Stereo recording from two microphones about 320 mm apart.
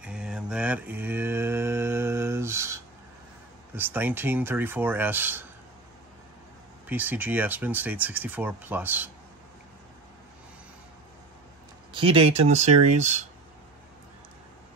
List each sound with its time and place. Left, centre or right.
0.0 s mantra: centre
3.7 s speech: centre
6.9 s speech: centre
11.9 s speech: centre